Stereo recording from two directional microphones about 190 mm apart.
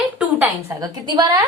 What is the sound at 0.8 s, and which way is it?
Speech, 20° right (ahead or behind).